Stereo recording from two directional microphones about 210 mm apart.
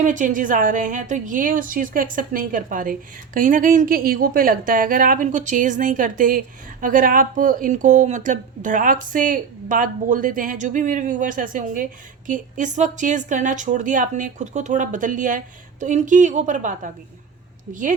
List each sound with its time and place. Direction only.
0.0 s speech: 40° right (ahead or behind)